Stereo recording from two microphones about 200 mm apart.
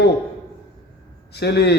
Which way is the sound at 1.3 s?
55° left (ahead or behind).